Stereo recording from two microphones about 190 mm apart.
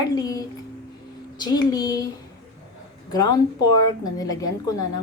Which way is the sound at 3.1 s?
20° left (ahead or behind).